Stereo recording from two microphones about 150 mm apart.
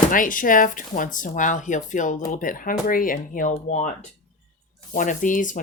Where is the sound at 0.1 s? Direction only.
65° left (ahead or behind).